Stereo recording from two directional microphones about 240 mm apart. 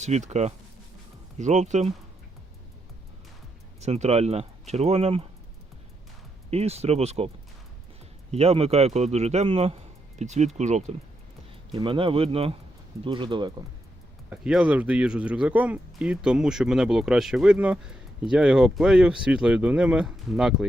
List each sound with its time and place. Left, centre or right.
0.0 s a man's voice: right
3.8 s a man's voice: right
6.5 s a man's voice: right
8.3 s a man's voice: right
14.3 s speech: centre